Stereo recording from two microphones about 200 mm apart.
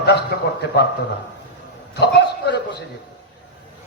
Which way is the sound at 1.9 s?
55° left (ahead or behind).